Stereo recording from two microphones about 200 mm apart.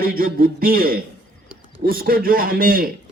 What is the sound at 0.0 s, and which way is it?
A man's voice, 45° right (ahead or behind).